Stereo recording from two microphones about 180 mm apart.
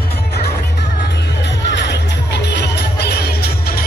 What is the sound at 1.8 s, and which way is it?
Jingle bell, 70° left (ahead or behind).